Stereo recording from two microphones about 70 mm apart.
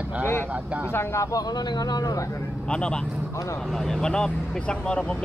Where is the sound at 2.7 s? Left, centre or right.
Centre.